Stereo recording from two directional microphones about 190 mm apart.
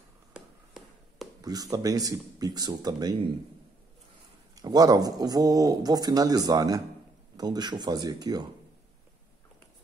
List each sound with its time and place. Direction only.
0.3 s a sound: centre (ahead or behind)
1.4 s speech: 20° right (ahead or behind)
4.6 s speech: 20° right (ahead or behind)